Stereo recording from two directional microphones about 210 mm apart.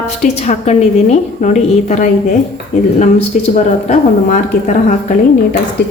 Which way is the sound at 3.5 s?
35° left (ahead or behind).